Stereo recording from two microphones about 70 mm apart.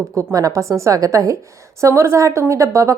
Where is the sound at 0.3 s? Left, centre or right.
Right.